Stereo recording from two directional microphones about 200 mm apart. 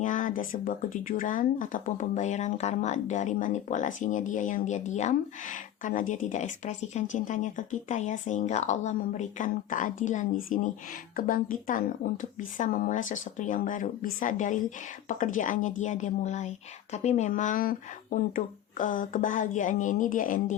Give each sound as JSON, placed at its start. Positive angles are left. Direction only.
{"t": 0.0, "sound": "speech", "side_deg": 40}